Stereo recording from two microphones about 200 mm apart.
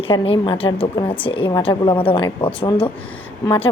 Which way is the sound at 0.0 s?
30° left (ahead or behind).